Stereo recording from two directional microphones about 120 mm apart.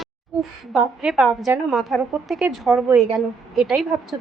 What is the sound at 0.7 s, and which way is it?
A woman's voice, 5° right (ahead or behind).